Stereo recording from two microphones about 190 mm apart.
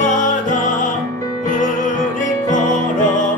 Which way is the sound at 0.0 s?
40° left (ahead or behind).